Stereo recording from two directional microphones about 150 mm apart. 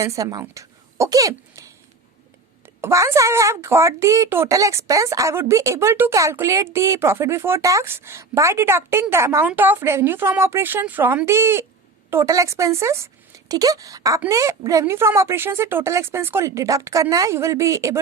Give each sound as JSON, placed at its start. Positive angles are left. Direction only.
{"t": 0.0, "sound": "a woman's voice", "side_deg": -20}